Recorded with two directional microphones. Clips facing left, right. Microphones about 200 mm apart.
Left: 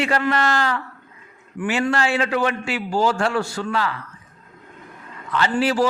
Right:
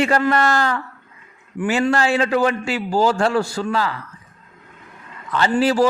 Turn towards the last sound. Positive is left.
turn(degrees=-40)  # may be behind; listen again after turning